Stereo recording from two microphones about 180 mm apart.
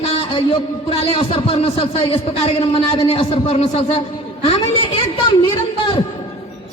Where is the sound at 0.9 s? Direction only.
30° left (ahead or behind).